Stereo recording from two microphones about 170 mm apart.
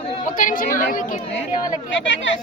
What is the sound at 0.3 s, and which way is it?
Speech, 50° left (ahead or behind).